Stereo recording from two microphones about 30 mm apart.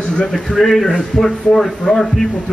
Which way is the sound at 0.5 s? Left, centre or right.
Centre.